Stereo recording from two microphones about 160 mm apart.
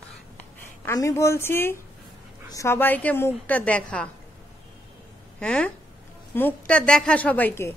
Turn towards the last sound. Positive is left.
turn(degrees=15)  # may be behind; listen again after turning